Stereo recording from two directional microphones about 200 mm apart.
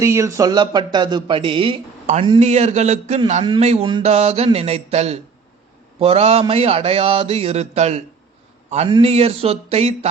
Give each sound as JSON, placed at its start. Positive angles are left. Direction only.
{"t": 0.0, "sound": "a man's voice", "side_deg": -15}